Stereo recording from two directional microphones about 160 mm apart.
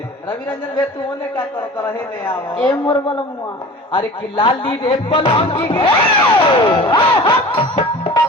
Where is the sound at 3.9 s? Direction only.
30° left (ahead or behind).